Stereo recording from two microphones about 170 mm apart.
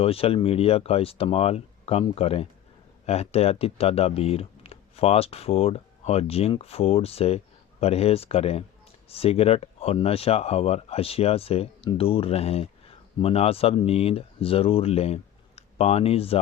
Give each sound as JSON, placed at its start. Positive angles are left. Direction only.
{"t": 0.0, "sound": "speech", "side_deg": 35}